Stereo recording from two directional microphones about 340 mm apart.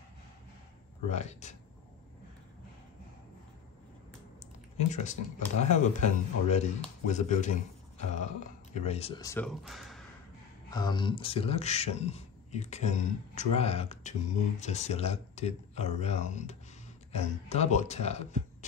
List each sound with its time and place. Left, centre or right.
1.0 s a man's voice: centre
4.4 s typing: left
5.6 s a man's voice: left
8.7 s speech: centre
10.7 s a man's voice: centre